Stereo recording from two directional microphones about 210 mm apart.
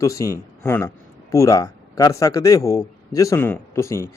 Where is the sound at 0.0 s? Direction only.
15° left (ahead or behind).